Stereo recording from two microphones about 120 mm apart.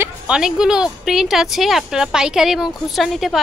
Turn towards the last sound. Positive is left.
turn(degrees=0)  # may be behind; listen again after turning